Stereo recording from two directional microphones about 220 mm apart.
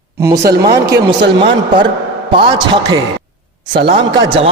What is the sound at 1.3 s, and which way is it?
A man's voice, 25° right (ahead or behind).